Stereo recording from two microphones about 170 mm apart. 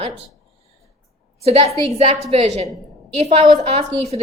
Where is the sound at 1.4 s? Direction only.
35° right (ahead or behind).